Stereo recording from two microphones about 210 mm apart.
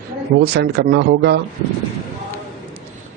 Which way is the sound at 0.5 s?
50° right (ahead or behind).